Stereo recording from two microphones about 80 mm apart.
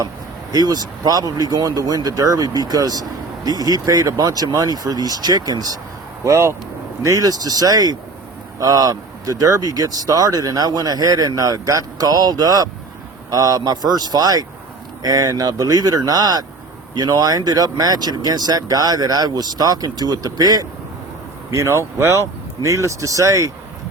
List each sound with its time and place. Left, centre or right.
0.5 s speech: right
6.2 s speech: right
7.0 s speech: right
21.5 s speech: right